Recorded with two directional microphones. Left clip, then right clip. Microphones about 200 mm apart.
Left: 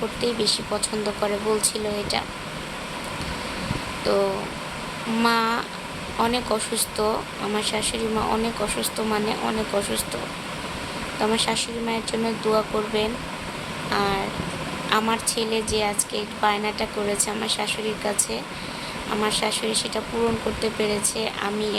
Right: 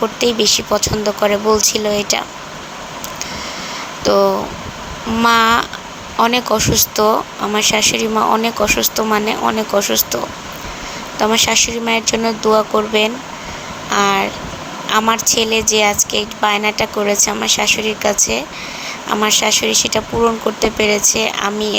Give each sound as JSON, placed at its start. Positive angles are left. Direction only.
{"t": 0.3, "sound": "speech", "side_deg": -30}
{"t": 4.0, "sound": "speech", "side_deg": -30}
{"t": 11.2, "sound": "speech", "side_deg": -30}